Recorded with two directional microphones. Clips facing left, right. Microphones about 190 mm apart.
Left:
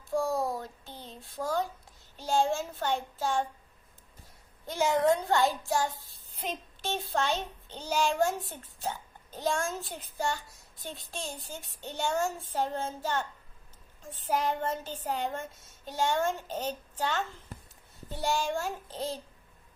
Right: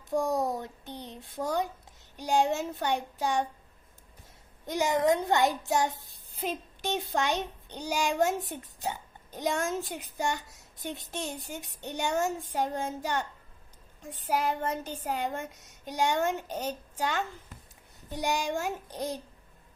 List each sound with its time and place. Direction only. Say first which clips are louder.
0.1 s child singing: right 1 dB; 20° right (ahead or behind)
2.1 s a child's voice: right 1 dB; 15° right (ahead or behind)
4.6 s a child's voice: even; 15° right (ahead or behind)